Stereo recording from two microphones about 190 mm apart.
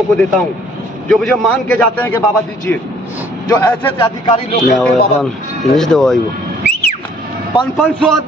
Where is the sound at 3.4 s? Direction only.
15° left (ahead or behind).